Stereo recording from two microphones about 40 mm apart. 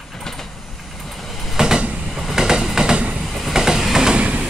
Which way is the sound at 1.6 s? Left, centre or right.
Centre.